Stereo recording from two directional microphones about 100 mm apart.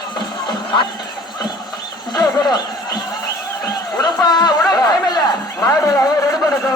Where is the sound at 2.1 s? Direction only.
40° left (ahead or behind).